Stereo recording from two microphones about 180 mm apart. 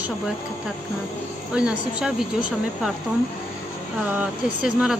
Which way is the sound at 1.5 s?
5° right (ahead or behind).